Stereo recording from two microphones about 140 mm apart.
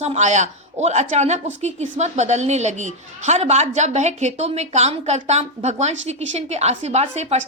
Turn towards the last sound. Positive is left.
turn(degrees=-55)  # may be behind; listen again after turning